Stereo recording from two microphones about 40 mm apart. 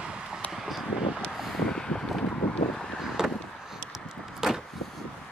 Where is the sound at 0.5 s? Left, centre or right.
Centre.